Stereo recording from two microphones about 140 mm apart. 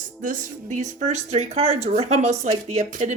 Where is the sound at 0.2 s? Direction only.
65° right (ahead or behind).